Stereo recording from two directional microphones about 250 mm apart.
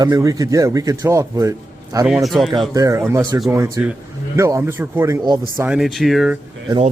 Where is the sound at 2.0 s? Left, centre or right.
Centre.